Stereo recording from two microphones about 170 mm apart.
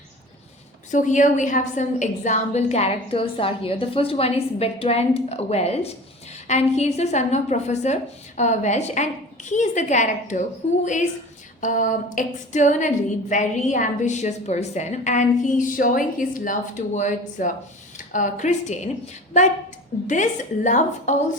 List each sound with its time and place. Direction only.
0.9 s a woman's voice: 50° left (ahead or behind)
20.7 s a woman's voice: 45° left (ahead or behind)